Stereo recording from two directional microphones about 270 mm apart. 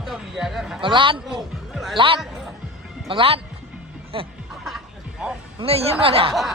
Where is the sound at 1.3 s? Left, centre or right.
Centre.